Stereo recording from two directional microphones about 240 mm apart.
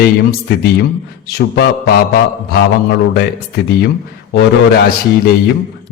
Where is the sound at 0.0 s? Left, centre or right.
Left.